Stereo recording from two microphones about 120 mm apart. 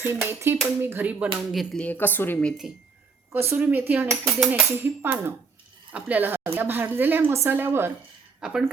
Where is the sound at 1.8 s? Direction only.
15° left (ahead or behind).